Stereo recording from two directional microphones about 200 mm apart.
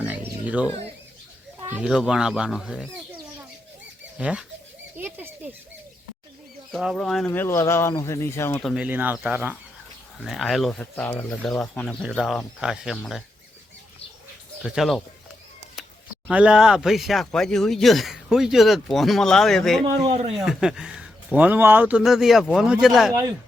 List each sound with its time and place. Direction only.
0.0 s oink: 5° right (ahead or behind)
1.6 s speech: 5° right (ahead or behind)
4.2 s speech: 5° right (ahead or behind)
6.7 s speech: centre (ahead or behind)
7.3 s speech: 10° left (ahead or behind)
8.6 s speech: 5° right (ahead or behind)
14.6 s speech: centre (ahead or behind)
19.8 s speech: 30° right (ahead or behind)
20.3 s speech: centre (ahead or behind)